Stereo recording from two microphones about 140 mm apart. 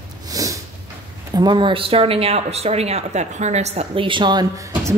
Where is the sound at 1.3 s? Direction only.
30° right (ahead or behind).